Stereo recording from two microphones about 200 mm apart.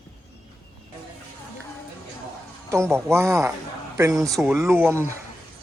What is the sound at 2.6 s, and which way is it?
Speech, 15° right (ahead or behind).